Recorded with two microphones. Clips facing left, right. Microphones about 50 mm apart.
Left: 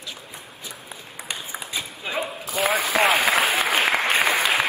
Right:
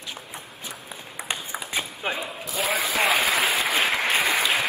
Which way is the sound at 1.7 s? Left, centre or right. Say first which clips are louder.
Right 4 dB; right.